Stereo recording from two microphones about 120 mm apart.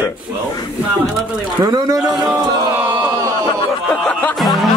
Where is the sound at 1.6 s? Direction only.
35° right (ahead or behind).